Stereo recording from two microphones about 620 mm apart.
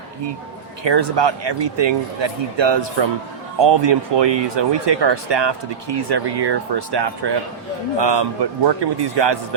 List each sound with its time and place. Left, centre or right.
0.9 s speech: right